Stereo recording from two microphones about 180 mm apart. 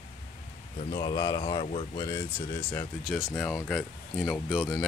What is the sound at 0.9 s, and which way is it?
Speech, 25° left (ahead or behind).